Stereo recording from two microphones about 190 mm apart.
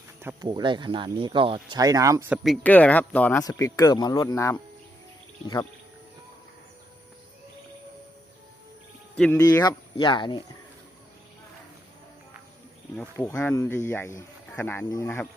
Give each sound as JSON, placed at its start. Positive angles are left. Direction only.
{"t": 0.4, "sound": "speech", "side_deg": -25}
{"t": 2.4, "sound": "speech", "side_deg": 5}
{"t": 3.4, "sound": "speech", "side_deg": 20}
{"t": 9.1, "sound": "speech", "side_deg": 5}
{"t": 9.4, "sound": "speech", "side_deg": 20}
{"t": 13.0, "sound": "speech", "side_deg": 15}